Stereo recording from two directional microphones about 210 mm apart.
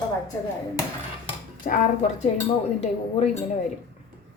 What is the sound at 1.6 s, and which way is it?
Speech, 35° left (ahead or behind).